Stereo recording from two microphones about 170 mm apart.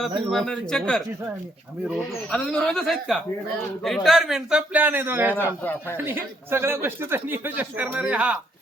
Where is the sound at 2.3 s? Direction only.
5° left (ahead or behind); by 5.3 s 10° right (ahead or behind).